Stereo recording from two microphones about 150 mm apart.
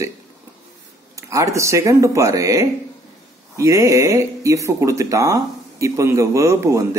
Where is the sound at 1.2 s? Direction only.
20° right (ahead or behind).